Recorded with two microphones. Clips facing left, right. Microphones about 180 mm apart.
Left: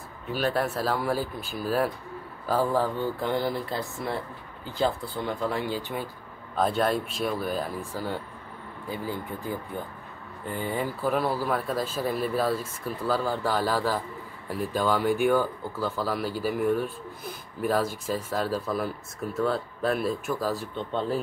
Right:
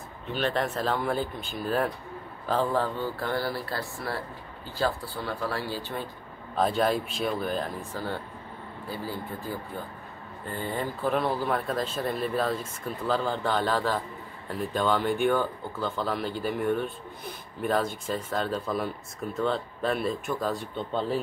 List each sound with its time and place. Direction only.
0.3 s speech: 5° left (ahead or behind)
6.5 s speech: centre (ahead or behind)